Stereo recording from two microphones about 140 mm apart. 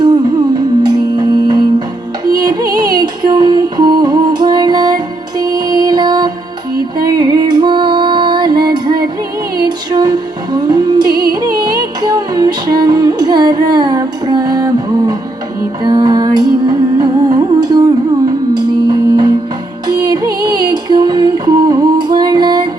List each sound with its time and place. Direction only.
0.0 s music: 30° right (ahead or behind)